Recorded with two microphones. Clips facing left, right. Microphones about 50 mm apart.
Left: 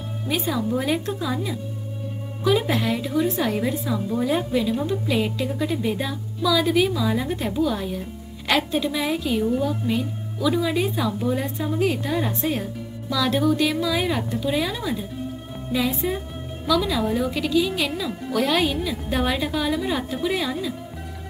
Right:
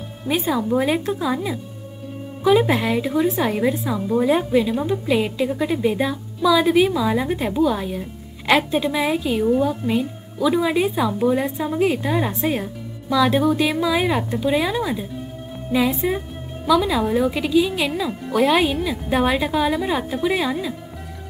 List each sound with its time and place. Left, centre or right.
0.3 s a woman's voice: centre